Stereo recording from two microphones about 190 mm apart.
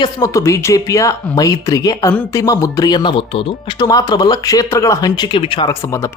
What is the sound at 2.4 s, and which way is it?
Speech, 20° left (ahead or behind).